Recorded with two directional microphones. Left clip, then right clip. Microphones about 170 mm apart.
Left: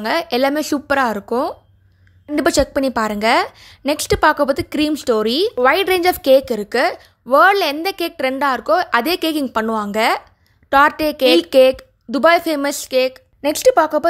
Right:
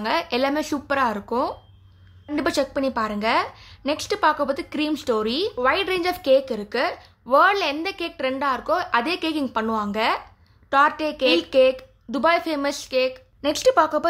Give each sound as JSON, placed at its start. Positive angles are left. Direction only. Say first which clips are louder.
{"t": 0.0, "sound": "a woman's voice", "louder": "left 5 dB", "side_deg": 35}